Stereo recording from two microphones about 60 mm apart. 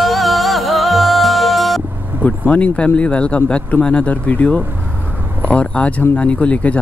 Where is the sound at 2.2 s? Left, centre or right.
Left.